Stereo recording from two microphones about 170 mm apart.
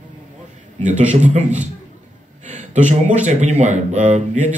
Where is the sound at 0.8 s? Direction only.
45° right (ahead or behind).